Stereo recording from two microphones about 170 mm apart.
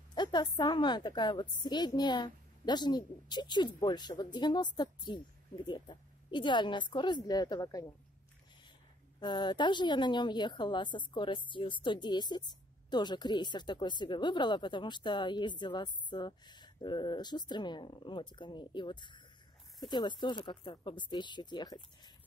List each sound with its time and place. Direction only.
0.1 s a woman's voice: 25° left (ahead or behind)
9.2 s a woman's voice: 25° left (ahead or behind)